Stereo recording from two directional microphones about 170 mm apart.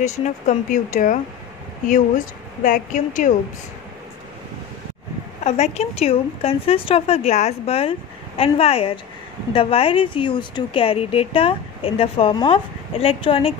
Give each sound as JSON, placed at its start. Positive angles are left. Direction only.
{"t": 0.0, "sound": "speech", "side_deg": 45}
{"t": 5.4, "sound": "a woman's voice", "side_deg": 40}